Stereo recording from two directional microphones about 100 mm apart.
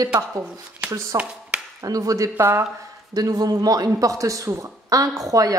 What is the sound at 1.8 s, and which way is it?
Speech, 35° right (ahead or behind).